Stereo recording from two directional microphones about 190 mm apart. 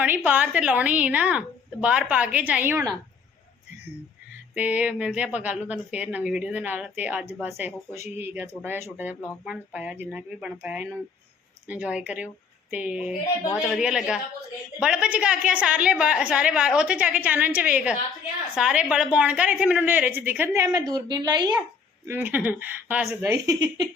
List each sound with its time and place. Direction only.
0.0 s a woman's voice: 10° right (ahead or behind)
4.5 s a woman's voice: 10° right (ahead or behind)
22.0 s a woman's voice: 10° right (ahead or behind)